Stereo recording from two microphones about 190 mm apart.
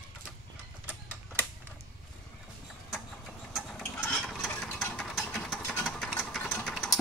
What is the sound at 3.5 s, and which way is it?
Mechanisms, centre (ahead or behind).